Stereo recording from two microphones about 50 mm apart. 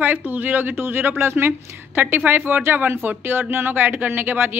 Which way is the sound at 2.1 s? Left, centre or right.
Right.